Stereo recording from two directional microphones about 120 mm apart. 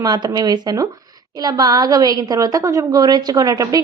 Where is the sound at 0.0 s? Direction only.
35° right (ahead or behind).